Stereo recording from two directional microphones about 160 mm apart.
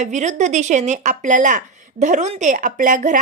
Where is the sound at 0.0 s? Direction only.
50° right (ahead or behind).